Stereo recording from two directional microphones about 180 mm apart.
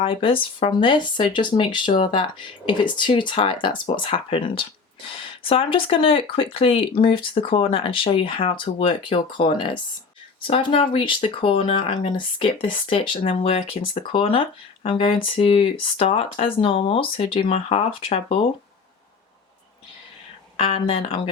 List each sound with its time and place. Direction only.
0.0 s speech: 30° left (ahead or behind)
20.6 s speech: 30° left (ahead or behind)